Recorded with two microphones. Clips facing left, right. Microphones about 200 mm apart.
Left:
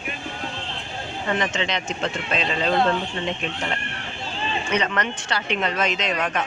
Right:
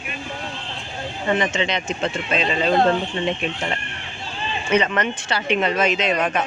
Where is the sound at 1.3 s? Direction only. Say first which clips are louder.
Right 3 dB; 5° right (ahead or behind).